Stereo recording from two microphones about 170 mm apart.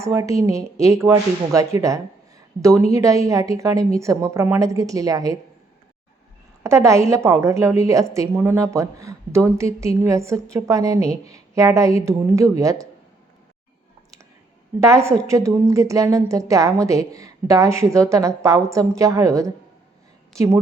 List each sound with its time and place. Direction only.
0.0 s a woman's voice: 20° right (ahead or behind)
6.6 s a woman's voice: 15° right (ahead or behind)
14.8 s a woman's voice: 15° right (ahead or behind)